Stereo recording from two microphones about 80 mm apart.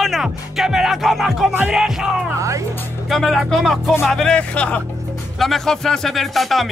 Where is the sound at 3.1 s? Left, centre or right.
Centre.